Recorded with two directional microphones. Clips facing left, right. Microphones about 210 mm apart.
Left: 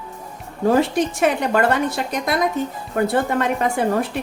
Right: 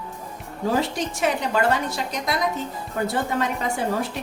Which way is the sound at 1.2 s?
55° left (ahead or behind).